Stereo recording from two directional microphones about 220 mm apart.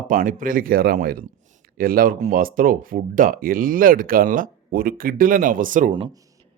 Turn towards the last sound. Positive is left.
turn(degrees=-35)  # may be behind; listen again after turning